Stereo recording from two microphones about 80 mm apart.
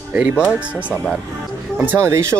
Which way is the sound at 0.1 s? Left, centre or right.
Centre.